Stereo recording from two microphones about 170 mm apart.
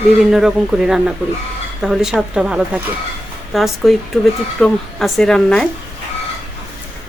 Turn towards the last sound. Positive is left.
turn(degrees=5)  # may be behind; listen again after turning